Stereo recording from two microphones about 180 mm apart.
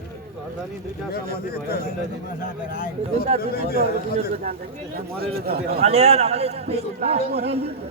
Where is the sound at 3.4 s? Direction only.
60° left (ahead or behind).